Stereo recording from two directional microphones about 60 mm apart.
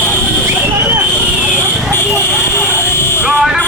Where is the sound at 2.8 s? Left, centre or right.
Left.